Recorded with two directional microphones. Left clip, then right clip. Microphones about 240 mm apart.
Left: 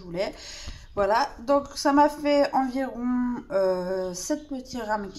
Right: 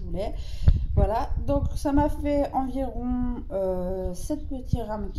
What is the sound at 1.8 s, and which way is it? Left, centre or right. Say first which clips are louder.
A woman's voice: left 5 dB; centre.